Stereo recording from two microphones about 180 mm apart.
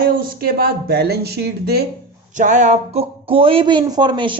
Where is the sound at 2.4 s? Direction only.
45° right (ahead or behind).